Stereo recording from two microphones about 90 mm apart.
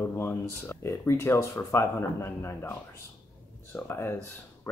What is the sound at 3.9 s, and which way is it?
Speech, 30° left (ahead or behind).